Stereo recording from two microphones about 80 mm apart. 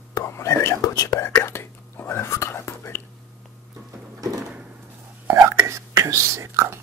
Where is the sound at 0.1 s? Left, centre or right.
Left.